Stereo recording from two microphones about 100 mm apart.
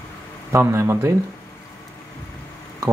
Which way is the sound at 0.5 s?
30° right (ahead or behind).